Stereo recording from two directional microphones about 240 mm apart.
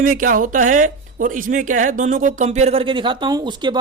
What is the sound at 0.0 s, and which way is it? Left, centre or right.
Speech, right.